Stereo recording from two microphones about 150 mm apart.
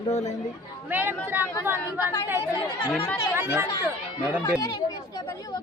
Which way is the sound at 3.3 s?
15° right (ahead or behind).